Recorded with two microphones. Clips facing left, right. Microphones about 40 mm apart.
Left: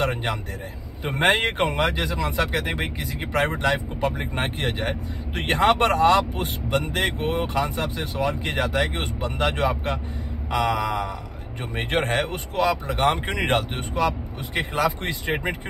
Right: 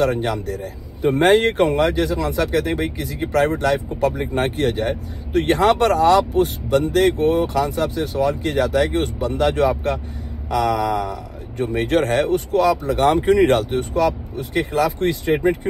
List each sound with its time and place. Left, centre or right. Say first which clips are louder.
0.0 s speech: right 6 dB; left